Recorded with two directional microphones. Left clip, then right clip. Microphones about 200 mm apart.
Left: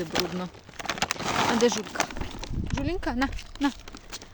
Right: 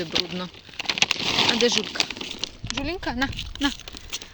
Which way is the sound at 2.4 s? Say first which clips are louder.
Right 2 dB; 15° left (ahead or behind).